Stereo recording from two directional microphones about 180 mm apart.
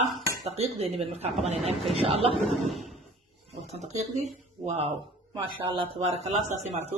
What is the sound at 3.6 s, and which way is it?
Speech, 40° right (ahead or behind).